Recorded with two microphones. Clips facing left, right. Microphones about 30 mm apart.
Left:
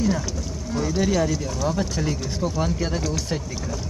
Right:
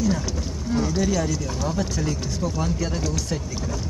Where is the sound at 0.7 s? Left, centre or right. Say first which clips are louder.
Right 2 dB; centre.